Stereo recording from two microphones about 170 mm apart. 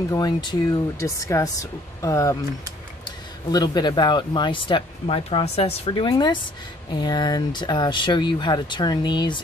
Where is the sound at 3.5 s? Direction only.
25° left (ahead or behind).